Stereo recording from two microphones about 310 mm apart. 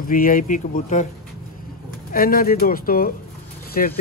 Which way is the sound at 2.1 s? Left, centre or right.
Left.